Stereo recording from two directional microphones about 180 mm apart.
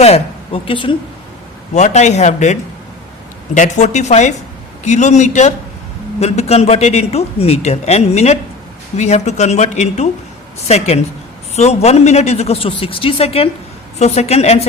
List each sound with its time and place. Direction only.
0.0 s speech: 35° left (ahead or behind)
1.7 s a man's voice: 40° left (ahead or behind)